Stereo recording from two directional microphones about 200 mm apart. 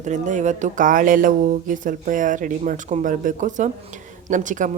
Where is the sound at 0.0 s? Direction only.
35° right (ahead or behind).